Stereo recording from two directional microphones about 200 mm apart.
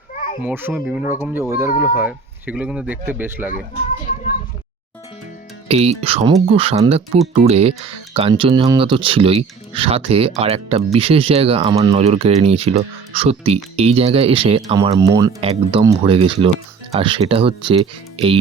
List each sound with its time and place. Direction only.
0.4 s speech: 10° right (ahead or behind)
5.6 s speech: 30° right (ahead or behind)
14.9 s speech: 15° right (ahead or behind)
15.4 s speech: 30° right (ahead or behind)
15.8 s speech: 20° right (ahead or behind)